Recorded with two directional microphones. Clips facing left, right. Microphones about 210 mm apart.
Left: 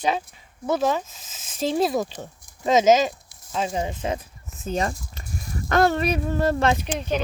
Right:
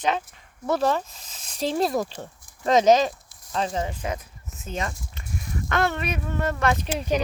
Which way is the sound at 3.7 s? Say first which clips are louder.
Left 2 dB; 20° left (ahead or behind).